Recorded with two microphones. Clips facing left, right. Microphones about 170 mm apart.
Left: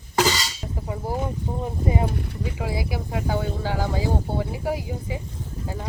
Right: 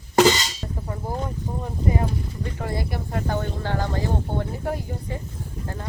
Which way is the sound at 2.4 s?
5° left (ahead or behind).